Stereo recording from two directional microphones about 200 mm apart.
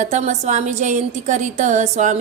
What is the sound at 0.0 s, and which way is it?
A woman's voice, 35° right (ahead or behind).